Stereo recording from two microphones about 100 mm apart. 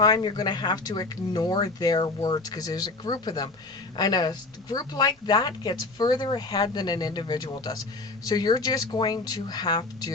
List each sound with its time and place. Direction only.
0.0 s speech: 45° left (ahead or behind)